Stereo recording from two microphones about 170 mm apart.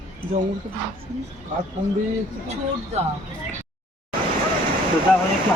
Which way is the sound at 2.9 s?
40° right (ahead or behind).